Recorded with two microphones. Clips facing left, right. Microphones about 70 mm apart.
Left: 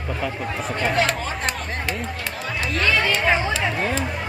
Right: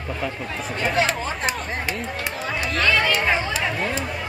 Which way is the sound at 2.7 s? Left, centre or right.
Centre.